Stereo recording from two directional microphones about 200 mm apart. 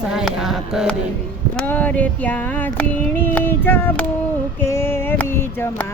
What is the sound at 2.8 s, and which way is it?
Female singing, 10° left (ahead or behind).